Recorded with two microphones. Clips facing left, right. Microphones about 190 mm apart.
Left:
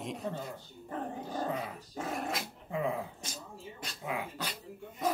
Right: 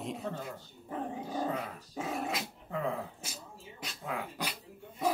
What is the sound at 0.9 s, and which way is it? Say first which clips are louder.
Dog: right 1 dB; 5° right (ahead or behind).